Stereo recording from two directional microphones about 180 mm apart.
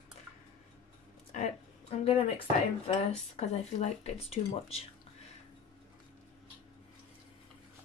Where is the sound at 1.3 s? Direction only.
40° left (ahead or behind).